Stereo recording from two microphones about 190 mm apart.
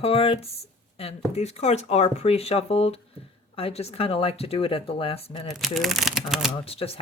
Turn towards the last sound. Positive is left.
turn(degrees=30)  # may be behind; listen again after turning